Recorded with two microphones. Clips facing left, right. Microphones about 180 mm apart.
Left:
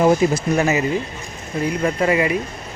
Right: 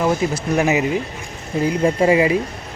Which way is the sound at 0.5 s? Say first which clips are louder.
Right 1 dB; 15° right (ahead or behind).